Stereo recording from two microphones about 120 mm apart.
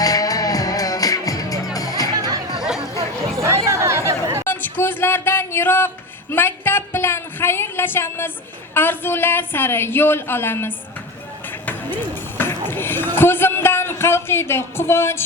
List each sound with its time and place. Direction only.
0.0 s music: 30° left (ahead or behind)
2.1 s music: 30° right (ahead or behind)
2.6 s chatter: 5° right (ahead or behind)
3.4 s chatter: 25° right (ahead or behind)
4.4 s a sound: 15° left (ahead or behind)
8.7 s speech: 20° left (ahead or behind)
12.4 s a sound: 20° left (ahead or behind)